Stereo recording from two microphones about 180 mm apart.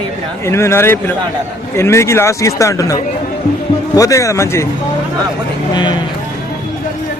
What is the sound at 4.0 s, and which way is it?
Speech, 15° left (ahead or behind).